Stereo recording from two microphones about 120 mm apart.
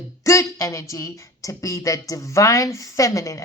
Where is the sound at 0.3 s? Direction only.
25° left (ahead or behind).